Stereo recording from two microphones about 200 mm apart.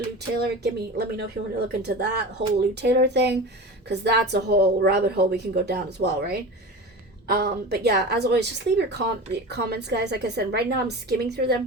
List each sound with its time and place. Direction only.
0.3 s a woman's voice: 55° right (ahead or behind)